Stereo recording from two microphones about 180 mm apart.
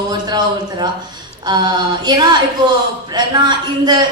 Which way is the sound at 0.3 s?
25° right (ahead or behind).